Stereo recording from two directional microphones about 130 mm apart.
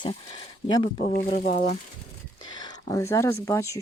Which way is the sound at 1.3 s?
90° left.